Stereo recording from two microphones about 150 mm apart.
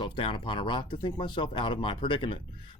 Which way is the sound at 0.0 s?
35° left (ahead or behind).